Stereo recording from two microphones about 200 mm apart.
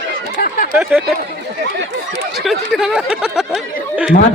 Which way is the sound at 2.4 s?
Centre (ahead or behind).